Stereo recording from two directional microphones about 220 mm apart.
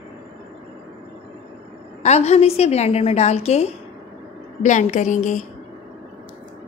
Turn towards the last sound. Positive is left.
turn(degrees=35)  # may be behind; listen again after turning